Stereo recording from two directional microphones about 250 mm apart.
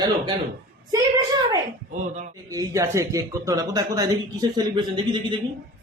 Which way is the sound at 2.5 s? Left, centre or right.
Centre.